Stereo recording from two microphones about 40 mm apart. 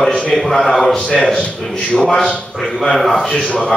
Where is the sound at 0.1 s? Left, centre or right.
Centre.